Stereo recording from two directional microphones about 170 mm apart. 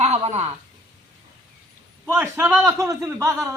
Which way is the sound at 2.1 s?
15° right (ahead or behind).